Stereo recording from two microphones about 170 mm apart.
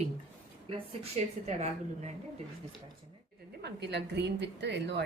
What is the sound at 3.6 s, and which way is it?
A woman's voice, 80° right.